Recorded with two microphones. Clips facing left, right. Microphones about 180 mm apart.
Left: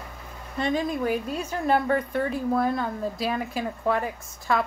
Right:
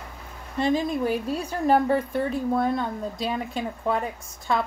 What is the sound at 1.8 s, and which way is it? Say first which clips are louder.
Speech: right 1 dB; 5° right (ahead or behind).